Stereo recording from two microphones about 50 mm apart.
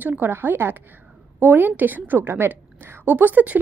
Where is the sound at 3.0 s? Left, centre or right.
Right.